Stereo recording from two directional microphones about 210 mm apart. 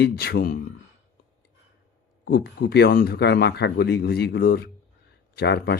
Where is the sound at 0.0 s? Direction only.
50° left (ahead or behind).